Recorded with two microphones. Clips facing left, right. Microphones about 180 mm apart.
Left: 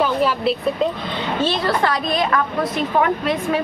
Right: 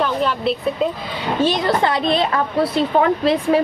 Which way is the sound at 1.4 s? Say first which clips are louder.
Right 3 dB; 20° right (ahead or behind).